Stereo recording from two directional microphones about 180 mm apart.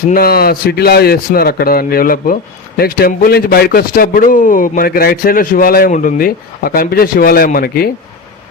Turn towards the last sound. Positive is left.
turn(degrees=55)  # may be behind; listen again after turning